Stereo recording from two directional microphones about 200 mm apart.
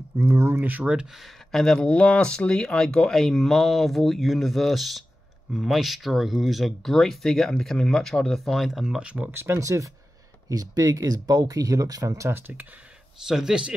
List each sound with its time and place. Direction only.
0.2 s speech: 10° right (ahead or behind)